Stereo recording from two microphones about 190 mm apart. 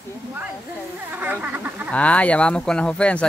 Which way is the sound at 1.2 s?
10° right (ahead or behind).